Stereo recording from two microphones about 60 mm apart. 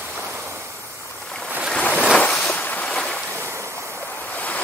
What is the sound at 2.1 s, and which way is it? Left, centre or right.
Ocean, left.